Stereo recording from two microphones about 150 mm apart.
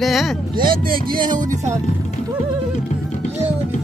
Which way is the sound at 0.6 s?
70° right (ahead or behind).